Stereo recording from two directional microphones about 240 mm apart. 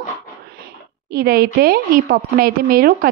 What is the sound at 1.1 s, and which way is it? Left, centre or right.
A woman's voice, right.